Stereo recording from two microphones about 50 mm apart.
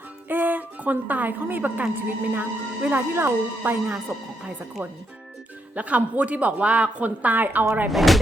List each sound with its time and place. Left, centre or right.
0.3 s a woman's voice: right
5.7 s speech: right
7.9 s speech: centre